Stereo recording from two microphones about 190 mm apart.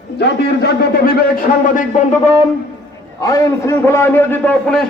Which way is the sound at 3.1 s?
15° left (ahead or behind).